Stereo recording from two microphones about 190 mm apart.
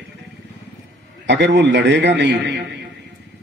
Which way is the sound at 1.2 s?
70° right (ahead or behind).